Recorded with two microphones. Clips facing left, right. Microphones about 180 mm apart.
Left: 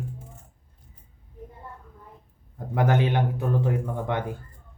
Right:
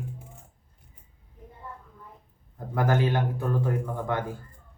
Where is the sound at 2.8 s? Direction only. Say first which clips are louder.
Left 2 dB; 20° left (ahead or behind).